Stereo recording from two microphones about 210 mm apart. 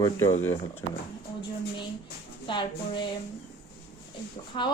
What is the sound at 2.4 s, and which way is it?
Speech, 20° left (ahead or behind).